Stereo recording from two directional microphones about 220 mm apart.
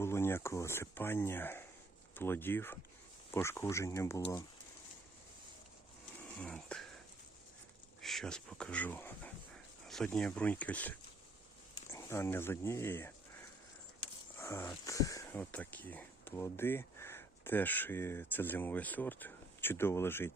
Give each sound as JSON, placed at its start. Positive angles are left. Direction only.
{"t": 0.0, "sound": "speech", "side_deg": 10}
{"t": 6.4, "sound": "speech", "side_deg": 5}
{"t": 8.0, "sound": "speech", "side_deg": 0}
{"t": 14.3, "sound": "speech", "side_deg": 10}